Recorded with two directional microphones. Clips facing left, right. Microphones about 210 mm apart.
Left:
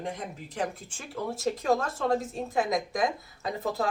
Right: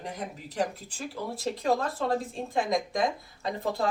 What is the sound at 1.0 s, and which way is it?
A woman's voice, centre (ahead or behind).